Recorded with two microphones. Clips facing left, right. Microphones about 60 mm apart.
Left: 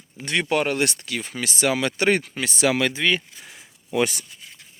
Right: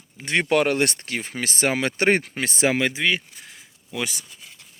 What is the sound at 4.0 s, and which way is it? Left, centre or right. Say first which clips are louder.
Speech: left 7 dB; left.